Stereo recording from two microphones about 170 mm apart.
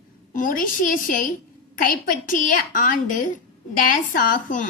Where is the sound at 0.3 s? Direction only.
55° left (ahead or behind).